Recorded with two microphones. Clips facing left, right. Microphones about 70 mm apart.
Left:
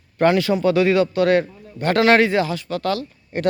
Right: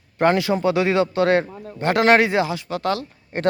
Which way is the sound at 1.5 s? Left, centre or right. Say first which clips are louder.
Right 6 dB; right.